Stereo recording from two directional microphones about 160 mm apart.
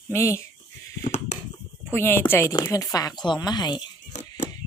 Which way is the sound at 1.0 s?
45° left (ahead or behind).